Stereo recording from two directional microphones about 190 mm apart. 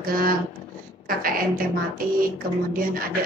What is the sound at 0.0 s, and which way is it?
Speech, 50° right (ahead or behind).